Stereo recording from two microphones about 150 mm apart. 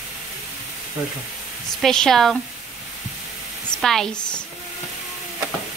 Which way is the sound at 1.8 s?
5° left (ahead or behind).